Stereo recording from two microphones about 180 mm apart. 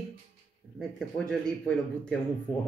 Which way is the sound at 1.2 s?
5° left (ahead or behind).